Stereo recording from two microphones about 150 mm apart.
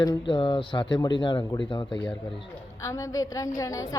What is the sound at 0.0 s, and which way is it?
Speech, 30° left (ahead or behind).